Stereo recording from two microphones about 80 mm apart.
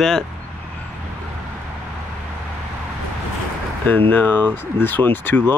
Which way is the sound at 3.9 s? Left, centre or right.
Left.